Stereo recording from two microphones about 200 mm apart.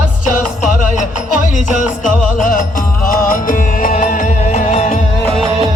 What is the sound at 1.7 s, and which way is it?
Music, 40° left (ahead or behind).